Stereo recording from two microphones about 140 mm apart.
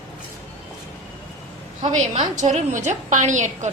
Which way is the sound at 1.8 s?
55° right (ahead or behind).